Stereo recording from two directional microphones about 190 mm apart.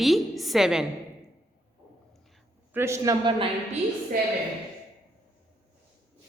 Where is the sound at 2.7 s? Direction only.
15° right (ahead or behind).